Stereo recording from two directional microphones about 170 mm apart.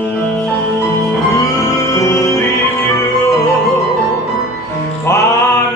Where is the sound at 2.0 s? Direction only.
15° left (ahead or behind).